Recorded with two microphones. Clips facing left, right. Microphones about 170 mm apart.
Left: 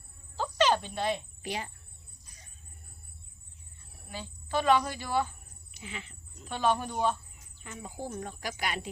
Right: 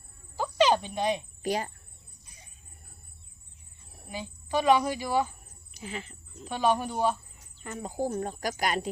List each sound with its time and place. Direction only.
0.3 s insect: 10° right (ahead or behind)
1.4 s speech: 40° right (ahead or behind)
4.1 s speech: 15° right (ahead or behind)
5.7 s speech: 40° right (ahead or behind)
6.4 s speech: 10° right (ahead or behind)
7.6 s speech: 45° right (ahead or behind)